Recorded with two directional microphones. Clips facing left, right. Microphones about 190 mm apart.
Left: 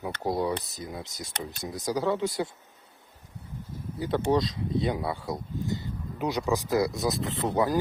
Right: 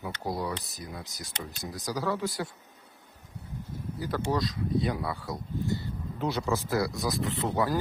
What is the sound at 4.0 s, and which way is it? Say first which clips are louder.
Speech: left 5 dB; 25° left (ahead or behind).